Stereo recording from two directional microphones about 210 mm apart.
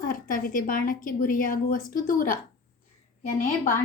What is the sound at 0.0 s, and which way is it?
A woman's voice, 40° left (ahead or behind).